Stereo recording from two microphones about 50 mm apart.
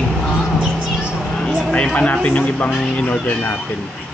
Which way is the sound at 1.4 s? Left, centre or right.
Centre.